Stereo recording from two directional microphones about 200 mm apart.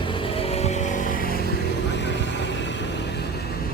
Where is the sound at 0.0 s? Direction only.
25° left (ahead or behind); by 1.3 s 45° left (ahead or behind).